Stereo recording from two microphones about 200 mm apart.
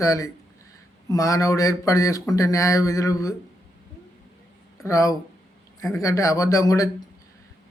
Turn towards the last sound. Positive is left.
turn(degrees=15)  # may be behind; listen again after turning